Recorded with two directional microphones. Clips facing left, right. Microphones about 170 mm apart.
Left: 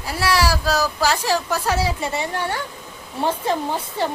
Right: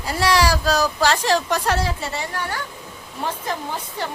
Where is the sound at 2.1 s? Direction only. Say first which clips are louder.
Left 3 dB; 25° left (ahead or behind).